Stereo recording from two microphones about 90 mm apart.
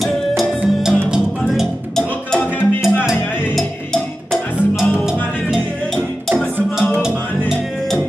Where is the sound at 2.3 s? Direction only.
15° left (ahead or behind).